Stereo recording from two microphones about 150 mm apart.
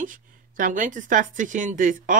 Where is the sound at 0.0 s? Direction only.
60° right (ahead or behind).